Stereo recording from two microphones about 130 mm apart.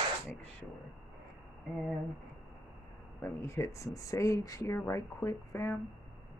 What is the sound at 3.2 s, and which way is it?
Speech, 20° left (ahead or behind).